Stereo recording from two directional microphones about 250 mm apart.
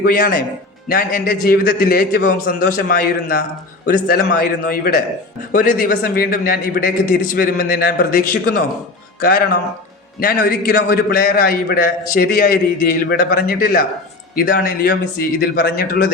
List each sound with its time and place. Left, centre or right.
0.0 s a man's voice: left